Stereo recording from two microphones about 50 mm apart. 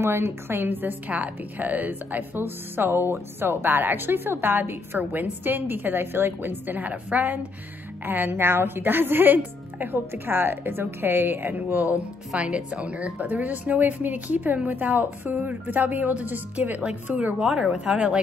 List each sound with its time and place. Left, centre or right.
0.0 s a woman's voice: right
12.4 s speech: right
16.8 s speech: right
17.4 s speech: centre
17.6 s speech: centre